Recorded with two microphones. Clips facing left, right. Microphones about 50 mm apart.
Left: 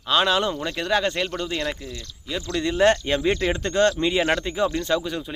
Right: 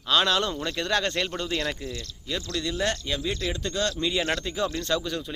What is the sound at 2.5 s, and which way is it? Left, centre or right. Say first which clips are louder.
Speech: left 10 dB; left.